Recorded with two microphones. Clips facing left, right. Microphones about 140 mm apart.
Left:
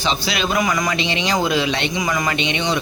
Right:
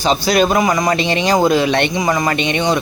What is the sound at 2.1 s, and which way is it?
Speech, 40° right (ahead or behind).